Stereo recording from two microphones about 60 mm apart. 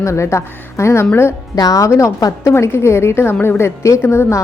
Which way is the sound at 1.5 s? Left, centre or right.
Left.